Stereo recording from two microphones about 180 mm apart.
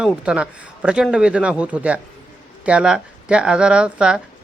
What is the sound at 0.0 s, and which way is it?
Speech, 5° right (ahead or behind).